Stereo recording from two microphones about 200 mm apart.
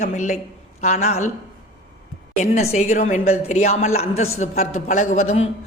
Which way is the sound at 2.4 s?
35° left (ahead or behind).